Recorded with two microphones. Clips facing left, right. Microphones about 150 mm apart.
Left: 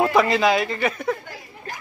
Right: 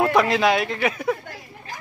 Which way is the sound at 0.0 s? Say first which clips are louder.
Even; centre (ahead or behind).